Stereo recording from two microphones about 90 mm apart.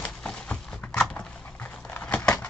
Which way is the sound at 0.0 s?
15° left (ahead or behind).